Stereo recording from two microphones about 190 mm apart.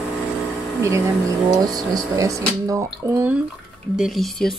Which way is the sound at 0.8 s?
15° right (ahead or behind).